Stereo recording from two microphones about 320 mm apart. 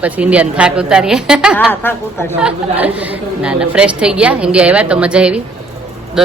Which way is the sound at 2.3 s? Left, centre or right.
Centre.